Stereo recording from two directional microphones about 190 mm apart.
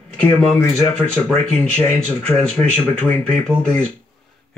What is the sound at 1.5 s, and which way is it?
Speech, 30° right (ahead or behind).